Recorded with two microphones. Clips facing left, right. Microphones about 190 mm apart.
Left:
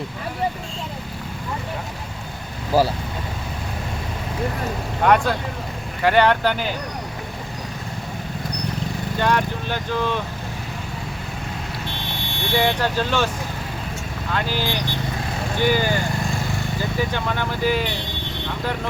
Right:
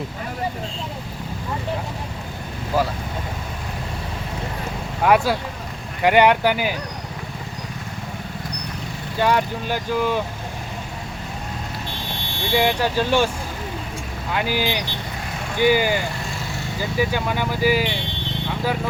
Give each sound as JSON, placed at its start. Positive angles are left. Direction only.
{"t": 2.7, "sound": "speech", "side_deg": 35}
{"t": 5.0, "sound": "speech", "side_deg": -5}
{"t": 9.1, "sound": "speech", "side_deg": -10}
{"t": 12.6, "sound": "speech", "side_deg": -15}
{"t": 14.3, "sound": "speech", "side_deg": -10}
{"t": 17.0, "sound": "speech", "side_deg": -10}